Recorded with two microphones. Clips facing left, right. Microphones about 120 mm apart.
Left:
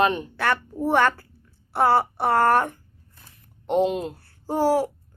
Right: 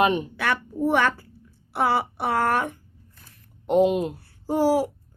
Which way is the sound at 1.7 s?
Centre (ahead or behind).